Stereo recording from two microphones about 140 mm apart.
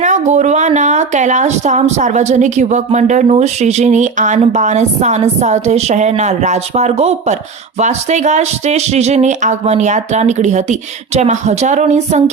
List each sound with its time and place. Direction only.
0.0 s speech: 60° right (ahead or behind)